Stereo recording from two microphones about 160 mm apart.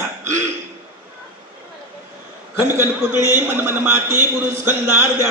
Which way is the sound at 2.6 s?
15° right (ahead or behind).